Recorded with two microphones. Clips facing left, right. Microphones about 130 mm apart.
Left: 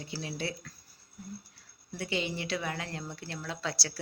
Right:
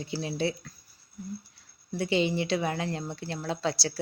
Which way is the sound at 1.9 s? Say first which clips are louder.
Right 7 dB; 25° right (ahead or behind).